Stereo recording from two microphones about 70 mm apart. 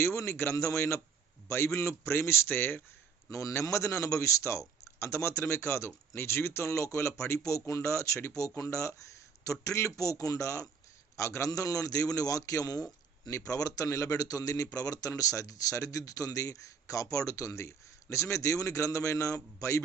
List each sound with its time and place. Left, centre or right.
0.0 s a man's voice: left
3.2 s a man's voice: left